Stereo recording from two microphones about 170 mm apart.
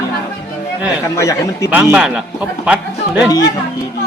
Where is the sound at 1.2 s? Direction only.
20° left (ahead or behind).